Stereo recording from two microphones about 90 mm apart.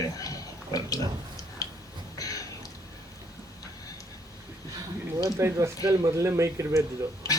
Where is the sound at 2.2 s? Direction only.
40° left (ahead or behind).